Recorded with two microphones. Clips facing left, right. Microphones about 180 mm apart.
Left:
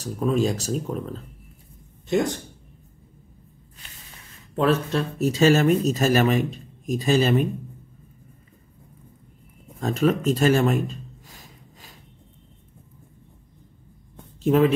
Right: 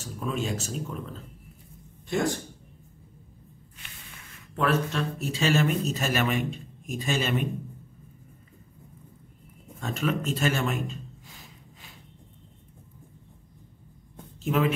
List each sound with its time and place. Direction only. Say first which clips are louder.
0.0 s speech: left 9 dB; 35° left (ahead or behind)
2.0 s speech: left 4 dB; 20° left (ahead or behind)
4.6 s speech: left 5 dB; 30° left (ahead or behind)
9.8 s a man's voice: left 7 dB; 35° left (ahead or behind)
14.4 s speech: left 7 dB; 35° left (ahead or behind)